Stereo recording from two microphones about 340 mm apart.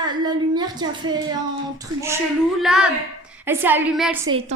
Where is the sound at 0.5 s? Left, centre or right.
Centre.